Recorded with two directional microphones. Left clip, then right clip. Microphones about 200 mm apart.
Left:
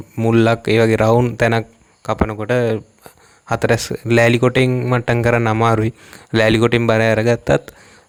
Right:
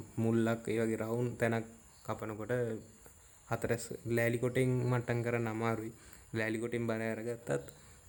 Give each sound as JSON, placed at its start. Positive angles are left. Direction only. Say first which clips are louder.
{"t": 0.2, "sound": "speech", "louder": "left 19 dB", "side_deg": 35}